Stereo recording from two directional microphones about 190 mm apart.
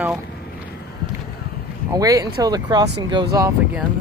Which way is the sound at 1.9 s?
20° right (ahead or behind).